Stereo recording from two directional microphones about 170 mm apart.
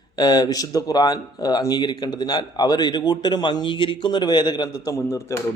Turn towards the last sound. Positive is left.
turn(degrees=15)  # may be behind; listen again after turning